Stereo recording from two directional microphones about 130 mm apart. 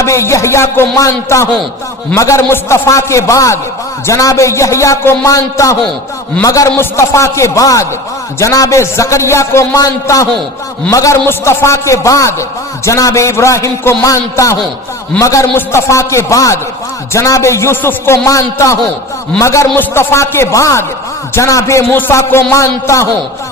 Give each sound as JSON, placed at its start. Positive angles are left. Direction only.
{"t": 0.0, "sound": "a man's voice", "side_deg": 20}